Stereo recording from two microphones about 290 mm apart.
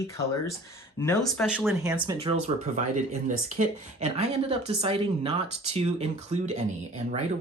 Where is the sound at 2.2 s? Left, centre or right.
Right.